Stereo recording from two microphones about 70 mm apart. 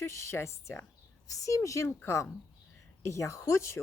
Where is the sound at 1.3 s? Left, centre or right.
Left.